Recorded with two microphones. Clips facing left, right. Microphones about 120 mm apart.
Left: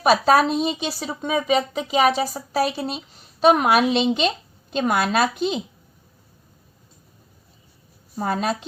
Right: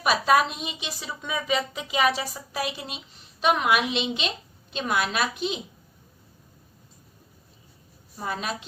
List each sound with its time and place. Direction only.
0.0 s a woman's voice: 40° left (ahead or behind)
8.1 s a woman's voice: 50° left (ahead or behind)